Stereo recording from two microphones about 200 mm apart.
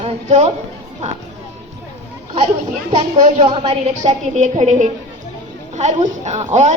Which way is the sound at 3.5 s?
30° right (ahead or behind).